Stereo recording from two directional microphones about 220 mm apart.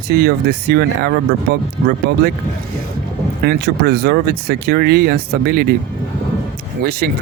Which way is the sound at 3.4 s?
45° right (ahead or behind).